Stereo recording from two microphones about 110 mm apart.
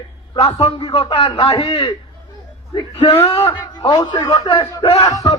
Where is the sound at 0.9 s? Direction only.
50° left (ahead or behind).